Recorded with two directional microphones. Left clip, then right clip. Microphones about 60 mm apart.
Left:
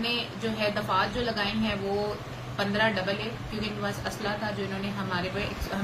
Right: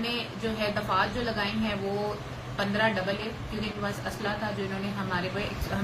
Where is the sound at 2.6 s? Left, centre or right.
Right.